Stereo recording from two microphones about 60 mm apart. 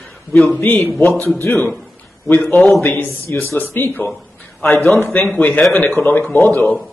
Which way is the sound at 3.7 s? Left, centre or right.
Left.